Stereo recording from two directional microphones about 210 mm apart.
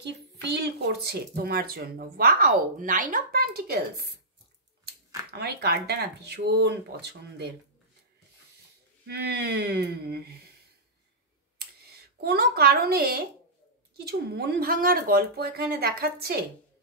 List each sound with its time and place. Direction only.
0.0 s speech: 50° right (ahead or behind)
9.0 s speech: 50° right (ahead or behind)
11.5 s a sound: 50° right (ahead or behind)
13.9 s speech: 50° right (ahead or behind)